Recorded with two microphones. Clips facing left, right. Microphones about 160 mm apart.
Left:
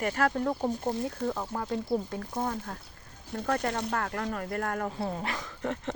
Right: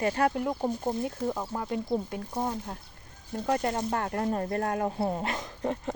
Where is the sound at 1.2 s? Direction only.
20° right (ahead or behind).